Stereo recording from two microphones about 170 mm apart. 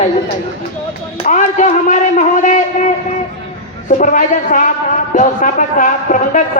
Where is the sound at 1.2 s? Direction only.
45° left (ahead or behind).